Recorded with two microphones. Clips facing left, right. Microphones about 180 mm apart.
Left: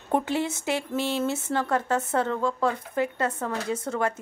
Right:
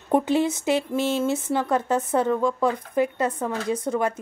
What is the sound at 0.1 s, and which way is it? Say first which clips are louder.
A woman's voice: right 5 dB; 15° right (ahead or behind).